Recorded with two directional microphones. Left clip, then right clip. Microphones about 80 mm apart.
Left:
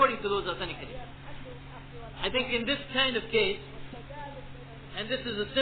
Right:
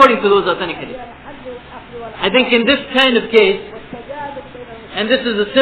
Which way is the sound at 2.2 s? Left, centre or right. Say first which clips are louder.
Right 16 dB; left.